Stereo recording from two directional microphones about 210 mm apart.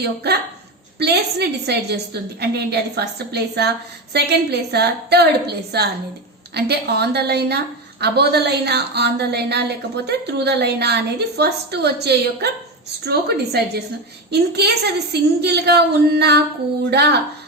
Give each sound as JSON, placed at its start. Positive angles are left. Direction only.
{"t": 0.0, "sound": "a woman's voice", "side_deg": -50}